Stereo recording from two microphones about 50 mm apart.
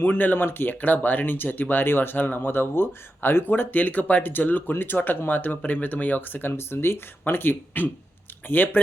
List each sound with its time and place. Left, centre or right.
0.0 s speech: left